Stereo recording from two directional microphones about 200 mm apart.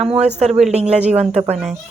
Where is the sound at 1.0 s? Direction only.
35° right (ahead or behind).